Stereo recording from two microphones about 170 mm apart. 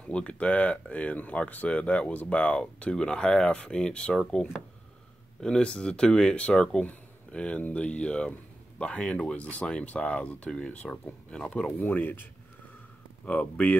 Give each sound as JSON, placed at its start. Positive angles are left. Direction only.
{"t": 0.0, "sound": "speech", "side_deg": 5}
{"t": 13.2, "sound": "speech", "side_deg": 10}